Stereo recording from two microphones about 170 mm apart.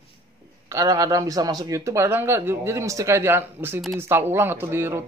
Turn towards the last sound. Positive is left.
turn(degrees=-15)  # may be behind; listen again after turning